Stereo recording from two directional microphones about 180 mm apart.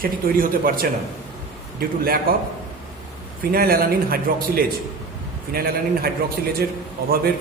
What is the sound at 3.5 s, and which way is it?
A man's voice, 55° right (ahead or behind).